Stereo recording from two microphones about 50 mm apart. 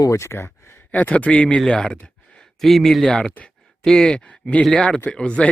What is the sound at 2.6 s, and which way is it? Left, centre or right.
Speech, centre.